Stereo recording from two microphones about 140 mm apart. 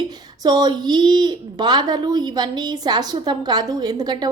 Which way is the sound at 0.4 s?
30° right (ahead or behind).